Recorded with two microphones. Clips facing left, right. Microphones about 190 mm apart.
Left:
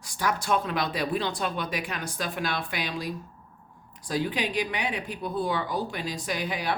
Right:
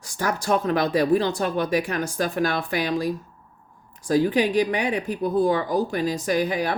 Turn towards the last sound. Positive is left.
turn(degrees=-45)  # may be behind; listen again after turning